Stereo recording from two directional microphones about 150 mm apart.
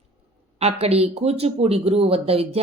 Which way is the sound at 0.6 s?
45° right (ahead or behind).